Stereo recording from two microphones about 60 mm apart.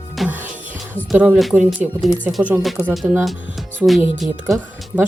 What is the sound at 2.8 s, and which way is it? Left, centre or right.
Speech, left.